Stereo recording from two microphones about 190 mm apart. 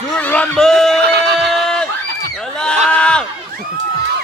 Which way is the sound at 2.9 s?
5° left (ahead or behind).